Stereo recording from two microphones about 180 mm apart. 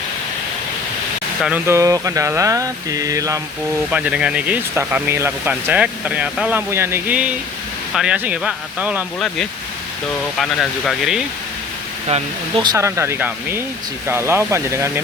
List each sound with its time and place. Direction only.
1.4 s speech: 5° right (ahead or behind)
3.9 s speech: 5° right (ahead or behind)
10.3 s speech: centre (ahead or behind)
12.0 s speech: 30° right (ahead or behind)
12.7 s speech: 15° right (ahead or behind)